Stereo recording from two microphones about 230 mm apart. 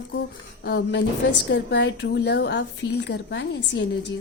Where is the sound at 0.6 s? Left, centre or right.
Left.